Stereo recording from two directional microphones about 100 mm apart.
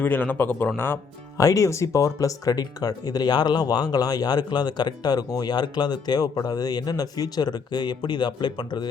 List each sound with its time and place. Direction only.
0.0 s a man's voice: 15° left (ahead or behind)
1.4 s speech: 35° left (ahead or behind)